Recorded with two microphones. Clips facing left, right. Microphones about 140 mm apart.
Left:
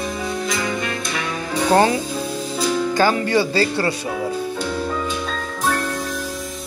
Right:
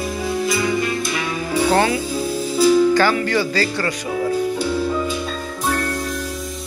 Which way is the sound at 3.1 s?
25° left (ahead or behind).